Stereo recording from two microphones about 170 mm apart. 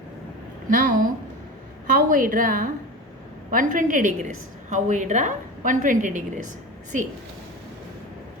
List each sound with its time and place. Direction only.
0.7 s a woman's voice: 50° right (ahead or behind)